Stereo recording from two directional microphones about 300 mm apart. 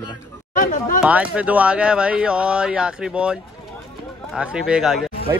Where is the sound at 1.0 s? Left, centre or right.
Centre.